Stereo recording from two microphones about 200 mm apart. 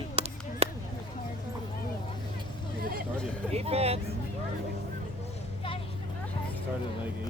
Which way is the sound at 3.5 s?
30° right (ahead or behind).